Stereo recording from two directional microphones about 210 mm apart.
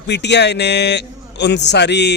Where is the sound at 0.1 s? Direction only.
55° left (ahead or behind).